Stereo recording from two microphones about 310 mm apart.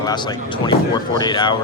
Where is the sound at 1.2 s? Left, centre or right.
Centre.